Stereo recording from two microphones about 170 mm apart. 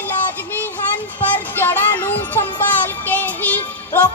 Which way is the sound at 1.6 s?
10° left (ahead or behind).